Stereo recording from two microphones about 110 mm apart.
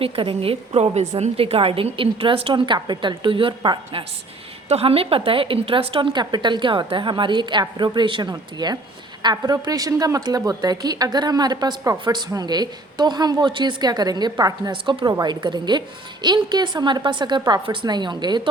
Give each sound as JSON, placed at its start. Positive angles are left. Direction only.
{"t": 0.0, "sound": "a woman's voice", "side_deg": -55}
{"t": 4.7, "sound": "a woman's voice", "side_deg": -65}